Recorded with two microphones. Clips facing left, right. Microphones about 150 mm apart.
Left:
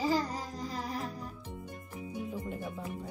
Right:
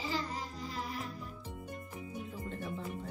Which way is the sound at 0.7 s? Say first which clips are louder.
Left 3 dB; 40° left (ahead or behind).